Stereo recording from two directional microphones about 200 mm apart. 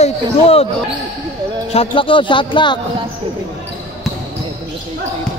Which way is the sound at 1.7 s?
30° left (ahead or behind).